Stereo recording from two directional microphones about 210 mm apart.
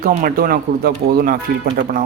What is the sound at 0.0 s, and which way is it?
Speech, 40° right (ahead or behind).